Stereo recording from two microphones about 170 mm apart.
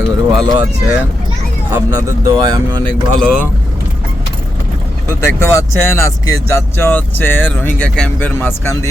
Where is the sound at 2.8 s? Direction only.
5° left (ahead or behind).